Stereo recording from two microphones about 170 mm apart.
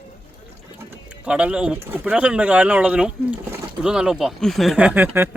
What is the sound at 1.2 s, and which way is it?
Speech, 5° right (ahead or behind).